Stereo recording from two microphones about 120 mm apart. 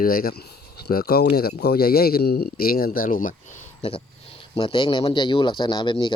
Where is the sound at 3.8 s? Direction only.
50° left (ahead or behind).